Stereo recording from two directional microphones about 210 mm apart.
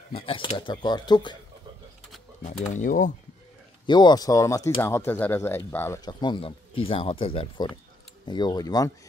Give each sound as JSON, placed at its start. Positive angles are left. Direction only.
{"t": 0.3, "sound": "speech", "side_deg": 25}
{"t": 2.4, "sound": "speech", "side_deg": 35}
{"t": 3.8, "sound": "speech", "side_deg": 20}